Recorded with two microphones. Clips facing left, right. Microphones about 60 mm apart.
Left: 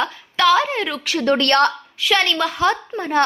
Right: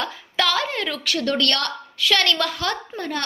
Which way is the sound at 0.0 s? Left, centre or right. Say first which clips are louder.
Left 6 dB; centre.